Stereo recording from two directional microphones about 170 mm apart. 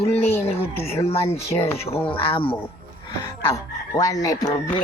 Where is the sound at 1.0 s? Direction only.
35° left (ahead or behind).